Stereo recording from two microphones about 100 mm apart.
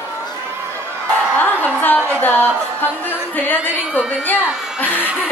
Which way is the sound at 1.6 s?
20° left (ahead or behind).